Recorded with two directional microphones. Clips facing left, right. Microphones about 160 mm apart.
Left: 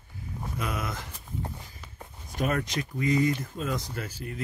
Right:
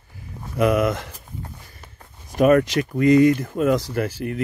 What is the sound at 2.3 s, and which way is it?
Speech, 85° right.